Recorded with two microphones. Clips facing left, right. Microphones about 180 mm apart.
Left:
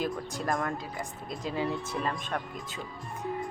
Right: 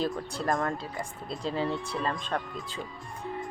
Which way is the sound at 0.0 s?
15° left (ahead or behind).